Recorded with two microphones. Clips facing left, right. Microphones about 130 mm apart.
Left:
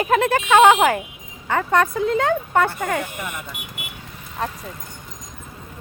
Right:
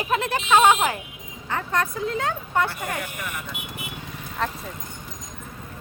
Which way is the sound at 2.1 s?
70° left (ahead or behind).